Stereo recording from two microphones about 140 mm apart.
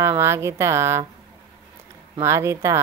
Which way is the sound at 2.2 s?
20° right (ahead or behind).